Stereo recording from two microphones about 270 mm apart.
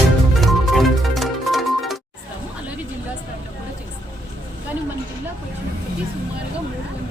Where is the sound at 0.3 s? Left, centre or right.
Centre.